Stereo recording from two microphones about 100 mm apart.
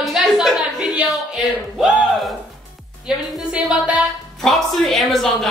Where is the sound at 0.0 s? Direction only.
Centre (ahead or behind).